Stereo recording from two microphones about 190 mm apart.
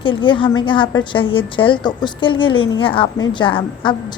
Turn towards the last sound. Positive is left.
turn(degrees=25)  # may be behind; listen again after turning